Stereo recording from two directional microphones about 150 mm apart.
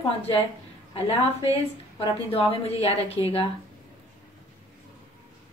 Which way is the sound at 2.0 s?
40° left (ahead or behind).